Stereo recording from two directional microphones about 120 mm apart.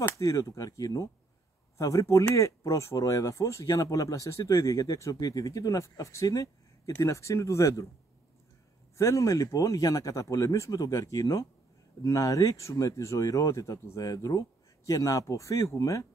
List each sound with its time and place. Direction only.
0.2 s speech: 25° left (ahead or behind)
8.9 s speech: 25° left (ahead or behind)